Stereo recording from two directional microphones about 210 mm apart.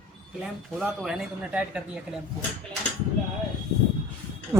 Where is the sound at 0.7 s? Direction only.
Centre (ahead or behind).